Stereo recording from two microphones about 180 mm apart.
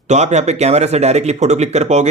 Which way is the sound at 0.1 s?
40° right (ahead or behind).